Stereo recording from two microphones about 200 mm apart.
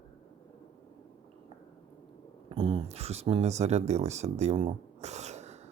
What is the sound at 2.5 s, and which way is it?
Speech, 25° right (ahead or behind).